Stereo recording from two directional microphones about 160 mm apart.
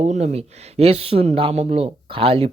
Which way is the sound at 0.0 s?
45° right (ahead or behind).